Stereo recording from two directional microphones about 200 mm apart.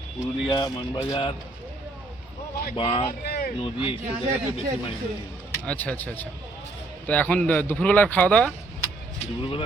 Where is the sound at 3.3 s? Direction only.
50° left (ahead or behind).